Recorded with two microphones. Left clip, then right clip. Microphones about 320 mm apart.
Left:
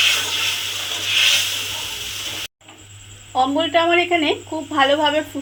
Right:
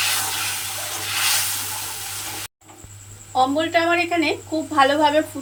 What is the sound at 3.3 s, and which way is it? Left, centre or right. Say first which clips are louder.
A woman's voice: left 1 dB; centre.